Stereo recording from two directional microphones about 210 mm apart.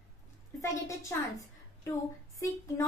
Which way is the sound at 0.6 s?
15° left (ahead or behind).